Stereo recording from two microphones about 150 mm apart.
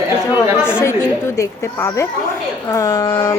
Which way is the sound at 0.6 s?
5° right (ahead or behind).